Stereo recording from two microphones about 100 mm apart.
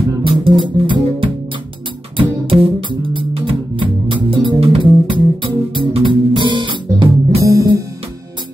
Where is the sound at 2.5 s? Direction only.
60° right (ahead or behind).